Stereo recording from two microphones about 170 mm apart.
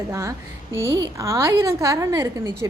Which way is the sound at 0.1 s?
20° right (ahead or behind).